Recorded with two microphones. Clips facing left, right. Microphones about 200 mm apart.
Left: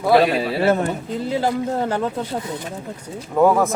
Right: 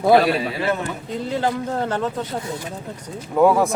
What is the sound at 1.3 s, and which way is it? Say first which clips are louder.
Speech: left 2 dB; 5° left (ahead or behind).